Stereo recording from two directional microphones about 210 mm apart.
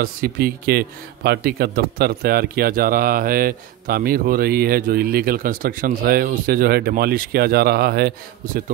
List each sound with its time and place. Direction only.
0.0 s speech: 45° right (ahead or behind)